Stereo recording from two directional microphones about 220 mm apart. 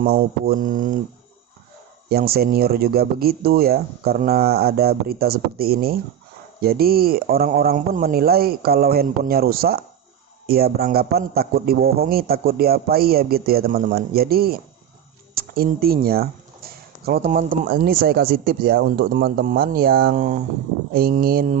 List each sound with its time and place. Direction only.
0.0 s mantra: 45° right (ahead or behind)
2.0 s speech: 45° right (ahead or behind)
20.9 s mantra: 40° right (ahead or behind)